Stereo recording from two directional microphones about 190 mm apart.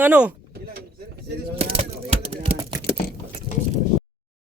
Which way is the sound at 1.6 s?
30° right (ahead or behind).